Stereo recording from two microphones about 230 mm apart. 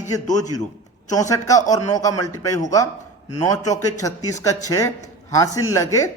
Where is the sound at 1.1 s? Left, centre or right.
Centre.